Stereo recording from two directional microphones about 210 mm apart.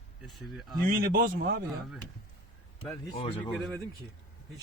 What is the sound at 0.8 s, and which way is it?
Speech, 45° right (ahead or behind).